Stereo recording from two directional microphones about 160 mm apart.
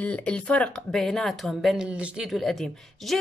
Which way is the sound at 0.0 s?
10° left (ahead or behind).